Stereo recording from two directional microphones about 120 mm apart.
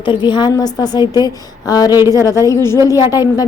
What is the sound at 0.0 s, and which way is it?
A woman's voice, 40° left (ahead or behind).